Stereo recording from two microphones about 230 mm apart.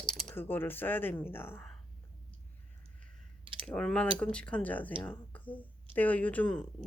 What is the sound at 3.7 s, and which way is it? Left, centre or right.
Speech, centre.